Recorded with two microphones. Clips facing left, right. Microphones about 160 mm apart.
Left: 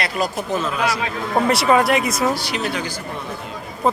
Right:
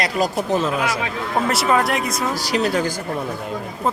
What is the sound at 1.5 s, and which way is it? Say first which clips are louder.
Speech: left 3 dB; centre (ahead or behind).